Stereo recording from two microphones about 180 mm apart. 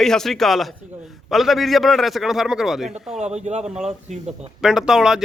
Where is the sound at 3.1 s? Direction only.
40° right (ahead or behind).